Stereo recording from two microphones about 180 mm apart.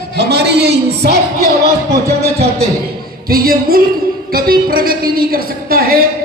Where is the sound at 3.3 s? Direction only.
55° right (ahead or behind).